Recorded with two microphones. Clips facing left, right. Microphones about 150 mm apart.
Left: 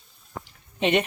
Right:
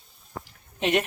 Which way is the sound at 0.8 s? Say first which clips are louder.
Left 2 dB; centre (ahead or behind).